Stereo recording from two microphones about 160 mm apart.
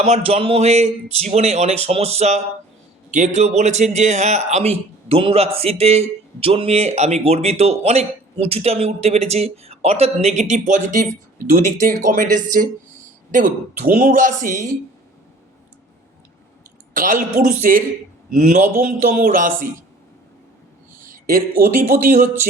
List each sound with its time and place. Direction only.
0.0 s a man's voice: 40° right (ahead or behind)
11.3 s speech: 65° right (ahead or behind)
16.9 s speech: 60° right (ahead or behind)
21.0 s a sound: 65° right (ahead or behind)
21.8 s speech: 60° right (ahead or behind)